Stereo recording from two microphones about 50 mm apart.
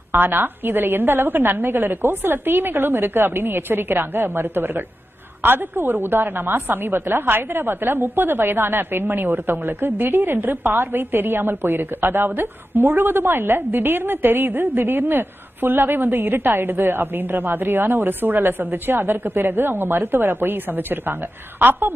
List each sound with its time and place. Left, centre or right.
0.1 s a woman's voice: right